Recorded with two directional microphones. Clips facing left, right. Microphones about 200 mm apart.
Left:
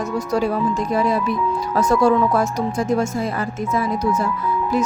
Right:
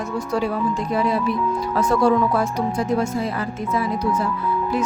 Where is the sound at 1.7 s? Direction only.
45° left (ahead or behind).